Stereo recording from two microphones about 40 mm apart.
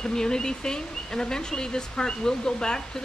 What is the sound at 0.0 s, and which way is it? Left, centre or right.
Speech, centre.